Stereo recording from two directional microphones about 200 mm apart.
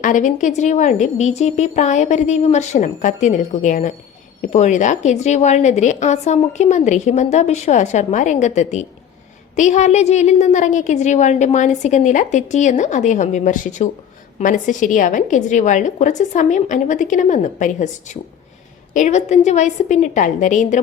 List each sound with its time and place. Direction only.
0.0 s a woman's voice: 40° left (ahead or behind)